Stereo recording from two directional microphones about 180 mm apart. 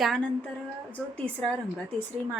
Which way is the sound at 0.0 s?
Centre (ahead or behind).